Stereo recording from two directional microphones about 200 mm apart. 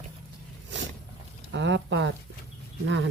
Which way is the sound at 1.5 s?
65° right (ahead or behind).